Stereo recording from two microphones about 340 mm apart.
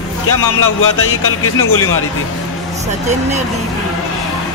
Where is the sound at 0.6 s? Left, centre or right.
Left.